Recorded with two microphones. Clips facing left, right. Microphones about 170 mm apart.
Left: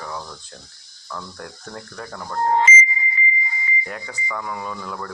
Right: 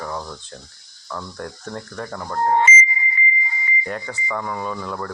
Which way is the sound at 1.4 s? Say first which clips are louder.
Right 4 dB; 45° right (ahead or behind).